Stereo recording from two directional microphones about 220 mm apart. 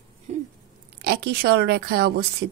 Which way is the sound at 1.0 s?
45° right (ahead or behind).